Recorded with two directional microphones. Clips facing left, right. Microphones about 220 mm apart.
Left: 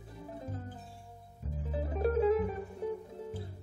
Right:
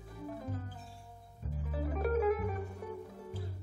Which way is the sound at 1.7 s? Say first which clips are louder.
Left 2 dB; 30° left (ahead or behind).